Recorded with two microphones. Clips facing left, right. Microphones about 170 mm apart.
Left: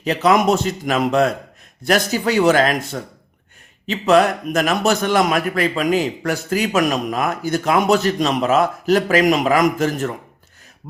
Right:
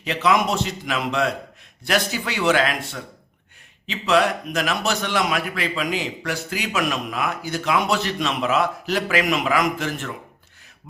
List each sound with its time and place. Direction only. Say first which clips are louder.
0.0 s a man's voice: left 5 dB; 40° left (ahead or behind)